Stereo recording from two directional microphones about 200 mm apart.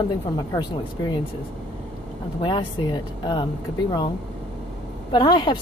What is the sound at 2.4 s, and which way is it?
A woman's voice, 25° left (ahead or behind).